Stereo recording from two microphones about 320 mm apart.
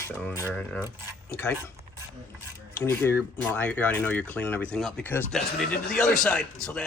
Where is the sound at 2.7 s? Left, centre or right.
Centre.